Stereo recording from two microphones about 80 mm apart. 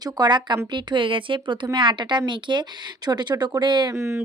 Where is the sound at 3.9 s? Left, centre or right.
Right.